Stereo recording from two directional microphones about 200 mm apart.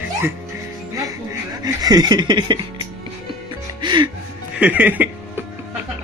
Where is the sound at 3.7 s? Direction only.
20° right (ahead or behind).